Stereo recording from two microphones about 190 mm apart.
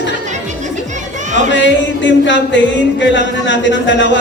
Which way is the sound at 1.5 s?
70° left (ahead or behind).